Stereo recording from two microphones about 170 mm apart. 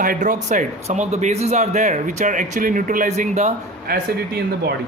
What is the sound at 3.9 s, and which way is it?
Speech, 65° right (ahead or behind).